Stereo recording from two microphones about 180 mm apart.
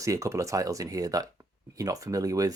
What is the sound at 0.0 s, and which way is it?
Speech, 20° right (ahead or behind).